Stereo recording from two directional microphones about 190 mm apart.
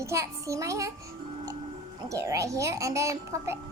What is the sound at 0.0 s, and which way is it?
Speech, 15° right (ahead or behind).